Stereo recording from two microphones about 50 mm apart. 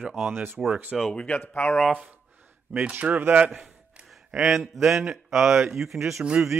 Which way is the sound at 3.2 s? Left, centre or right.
Right.